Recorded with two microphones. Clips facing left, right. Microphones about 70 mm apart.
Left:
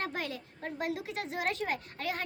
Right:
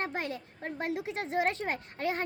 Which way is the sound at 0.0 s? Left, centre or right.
Right.